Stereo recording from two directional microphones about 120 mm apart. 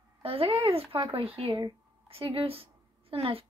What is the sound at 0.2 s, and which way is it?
A woman's voice, 50° right (ahead or behind).